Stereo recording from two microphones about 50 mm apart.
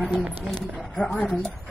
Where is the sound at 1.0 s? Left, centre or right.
Centre.